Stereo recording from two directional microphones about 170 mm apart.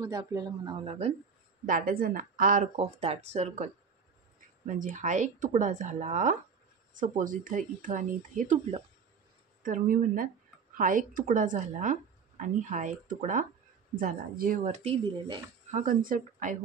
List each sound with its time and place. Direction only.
0.0 s speech: 20° right (ahead or behind)
0.7 s speech: 35° right (ahead or behind)
1.7 s speech: 55° right (ahead or behind)
2.7 s speech: 40° right (ahead or behind)
15.7 s speech: 50° right (ahead or behind)